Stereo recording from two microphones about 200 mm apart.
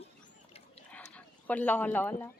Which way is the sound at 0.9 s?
5° left (ahead or behind).